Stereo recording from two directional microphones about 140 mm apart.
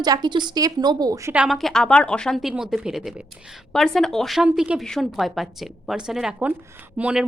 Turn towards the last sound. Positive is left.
turn(degrees=-5)  # may be behind; listen again after turning